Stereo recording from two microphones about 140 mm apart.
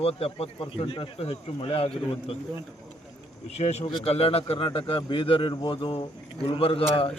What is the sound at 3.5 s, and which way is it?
Speech, 50° left (ahead or behind).